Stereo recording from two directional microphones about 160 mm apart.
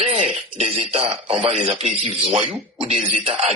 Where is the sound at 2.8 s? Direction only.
40° right (ahead or behind).